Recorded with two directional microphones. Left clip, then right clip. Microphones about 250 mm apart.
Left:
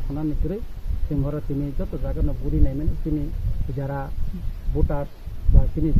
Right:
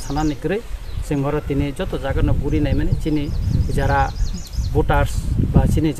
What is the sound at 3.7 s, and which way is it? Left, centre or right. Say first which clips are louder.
Speech: right 12 dB; right.